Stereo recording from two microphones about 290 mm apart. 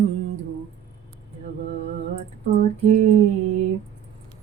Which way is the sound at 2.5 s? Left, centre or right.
Right.